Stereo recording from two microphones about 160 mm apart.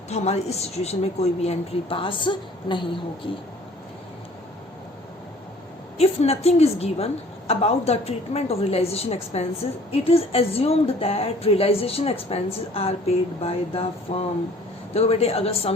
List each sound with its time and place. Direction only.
0.1 s a woman's voice: 40° left (ahead or behind)
6.0 s a woman's voice: 40° left (ahead or behind)